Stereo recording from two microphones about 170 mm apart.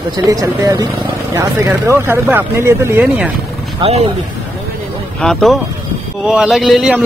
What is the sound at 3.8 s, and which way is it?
Speech, 35° right (ahead or behind).